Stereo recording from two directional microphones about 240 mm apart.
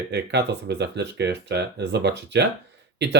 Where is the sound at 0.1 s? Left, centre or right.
Right.